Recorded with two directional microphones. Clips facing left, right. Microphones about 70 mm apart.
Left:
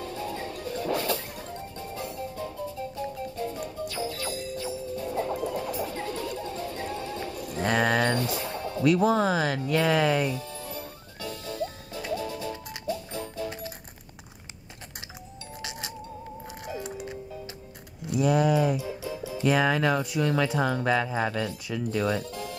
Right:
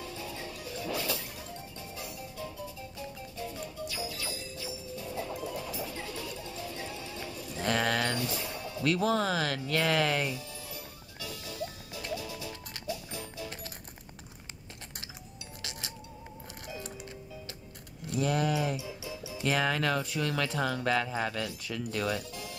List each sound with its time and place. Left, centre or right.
0.0 s music: left
7.6 s pigeon: left
8.0 s music: left
8.8 s speech: centre
10.3 s music: left
18.1 s a sound: centre
19.0 s music: left
19.5 s speech: centre
22.0 s speech: left